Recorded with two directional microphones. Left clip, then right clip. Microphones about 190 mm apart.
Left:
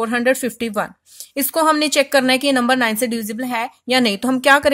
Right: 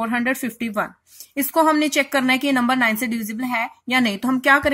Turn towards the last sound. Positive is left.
turn(degrees=45)  # may be behind; listen again after turning